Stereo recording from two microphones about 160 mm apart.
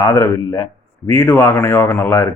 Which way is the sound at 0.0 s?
20° left (ahead or behind).